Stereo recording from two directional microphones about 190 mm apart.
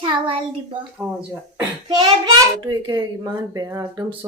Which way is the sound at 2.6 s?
20° right (ahead or behind).